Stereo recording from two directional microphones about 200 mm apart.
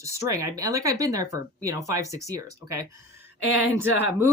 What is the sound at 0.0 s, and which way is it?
Speech, 15° right (ahead or behind).